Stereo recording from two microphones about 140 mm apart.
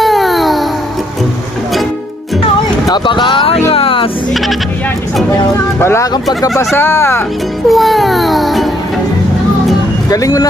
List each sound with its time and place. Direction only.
0.0 s babbling: centre (ahead or behind)
2.8 s speech: 35° left (ahead or behind)
5.8 s speech: 20° left (ahead or behind)
7.7 s music: centre (ahead or behind)
10.1 s speech: 25° left (ahead or behind)